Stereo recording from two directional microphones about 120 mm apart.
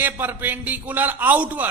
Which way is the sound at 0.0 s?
15° right (ahead or behind).